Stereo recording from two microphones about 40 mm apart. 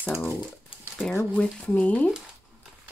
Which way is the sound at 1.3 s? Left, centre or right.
Left.